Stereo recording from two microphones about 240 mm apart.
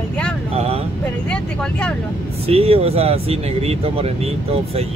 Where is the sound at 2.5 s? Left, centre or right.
Right.